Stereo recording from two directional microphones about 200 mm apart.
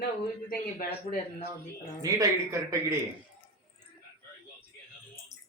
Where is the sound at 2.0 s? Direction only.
15° right (ahead or behind).